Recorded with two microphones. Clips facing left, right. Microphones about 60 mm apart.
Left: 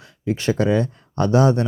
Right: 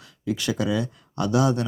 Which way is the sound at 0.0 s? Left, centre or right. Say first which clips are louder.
Left 5 dB; left.